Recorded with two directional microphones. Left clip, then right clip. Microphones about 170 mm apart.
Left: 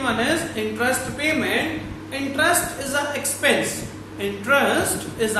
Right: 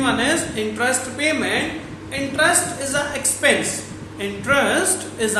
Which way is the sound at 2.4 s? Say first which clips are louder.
Right 2 dB; 20° right (ahead or behind).